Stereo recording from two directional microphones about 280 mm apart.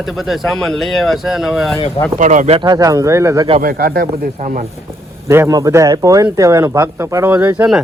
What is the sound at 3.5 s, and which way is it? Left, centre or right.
Speech, right.